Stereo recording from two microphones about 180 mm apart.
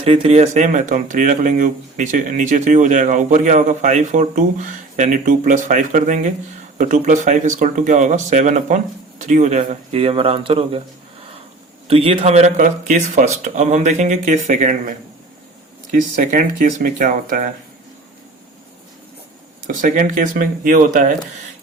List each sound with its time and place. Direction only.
0.0 s speech: 35° right (ahead or behind)
11.9 s speech: 30° right (ahead or behind); by 17.5 s 50° right (ahead or behind)
19.6 s speech: 45° right (ahead or behind)